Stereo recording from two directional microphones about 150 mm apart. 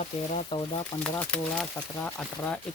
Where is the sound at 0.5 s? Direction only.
35° left (ahead or behind).